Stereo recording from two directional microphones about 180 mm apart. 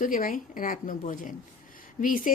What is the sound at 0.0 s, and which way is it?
Speech, 50° left (ahead or behind).